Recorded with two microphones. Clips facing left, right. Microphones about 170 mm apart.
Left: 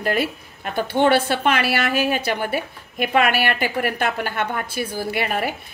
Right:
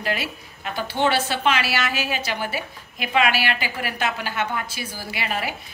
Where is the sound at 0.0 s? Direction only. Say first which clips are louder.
Left 5 dB; 50° left (ahead or behind).